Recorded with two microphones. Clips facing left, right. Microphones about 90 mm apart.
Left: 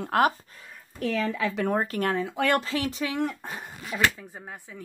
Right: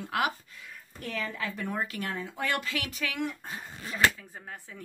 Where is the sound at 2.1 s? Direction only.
90° left.